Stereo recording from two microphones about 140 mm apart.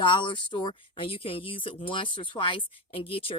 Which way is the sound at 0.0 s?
35° left (ahead or behind).